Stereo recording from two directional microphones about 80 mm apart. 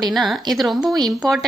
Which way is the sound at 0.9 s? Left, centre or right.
Right.